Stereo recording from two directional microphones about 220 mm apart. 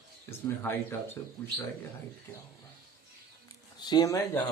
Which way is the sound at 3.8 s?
20° left (ahead or behind).